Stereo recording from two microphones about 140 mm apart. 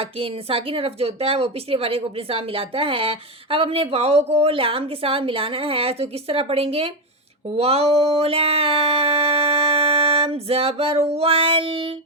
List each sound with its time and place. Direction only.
0.0 s a woman's voice: 40° right (ahead or behind)
7.5 s a sound: 45° right (ahead or behind)
11.1 s child singing: 45° right (ahead or behind)